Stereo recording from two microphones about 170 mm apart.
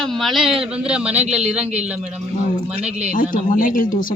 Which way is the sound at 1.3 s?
40° right (ahead or behind).